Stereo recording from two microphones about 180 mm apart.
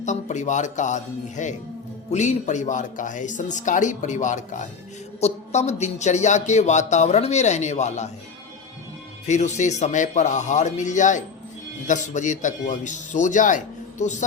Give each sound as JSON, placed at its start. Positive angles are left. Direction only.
{"t": 0.0, "sound": "a man's voice", "side_deg": 40}
{"t": 9.2, "sound": "a man's voice", "side_deg": 40}